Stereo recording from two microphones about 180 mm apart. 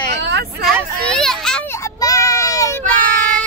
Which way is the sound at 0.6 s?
5° left (ahead or behind).